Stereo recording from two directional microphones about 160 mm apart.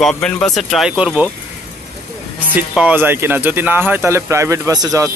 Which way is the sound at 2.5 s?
10° right (ahead or behind).